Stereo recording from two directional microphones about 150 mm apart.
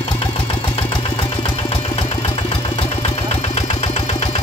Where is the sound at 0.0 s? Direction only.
40° left (ahead or behind).